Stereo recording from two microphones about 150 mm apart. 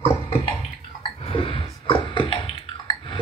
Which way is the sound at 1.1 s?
40° left (ahead or behind).